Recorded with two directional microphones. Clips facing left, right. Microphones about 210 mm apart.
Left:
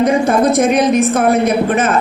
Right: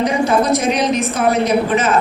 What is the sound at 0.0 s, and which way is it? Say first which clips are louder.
A man's voice: left 3 dB; 55° left (ahead or behind).